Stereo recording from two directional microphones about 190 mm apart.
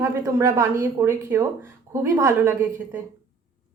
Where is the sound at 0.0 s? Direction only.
15° right (ahead or behind).